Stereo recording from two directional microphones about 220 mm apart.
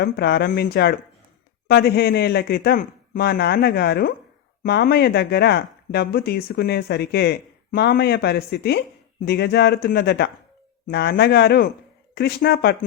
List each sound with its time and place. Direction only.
0.0 s speech: 50° left (ahead or behind)